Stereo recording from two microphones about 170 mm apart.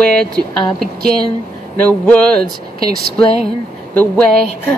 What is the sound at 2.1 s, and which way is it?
Speech, 5° left (ahead or behind).